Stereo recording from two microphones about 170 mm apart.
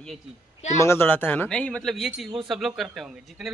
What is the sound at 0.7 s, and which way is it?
A man's voice, 15° left (ahead or behind).